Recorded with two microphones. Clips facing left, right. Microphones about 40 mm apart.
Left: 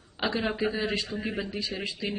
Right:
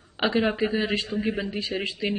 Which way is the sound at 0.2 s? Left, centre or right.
Right.